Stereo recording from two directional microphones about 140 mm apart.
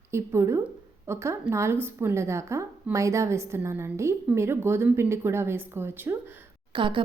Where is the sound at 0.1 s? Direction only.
20° right (ahead or behind).